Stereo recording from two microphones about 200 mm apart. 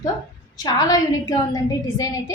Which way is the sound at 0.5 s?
15° left (ahead or behind).